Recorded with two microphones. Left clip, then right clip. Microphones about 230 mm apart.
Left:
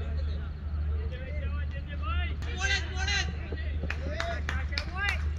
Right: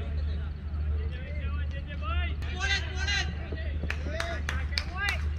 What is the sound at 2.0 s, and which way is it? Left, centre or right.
Vehicle, right.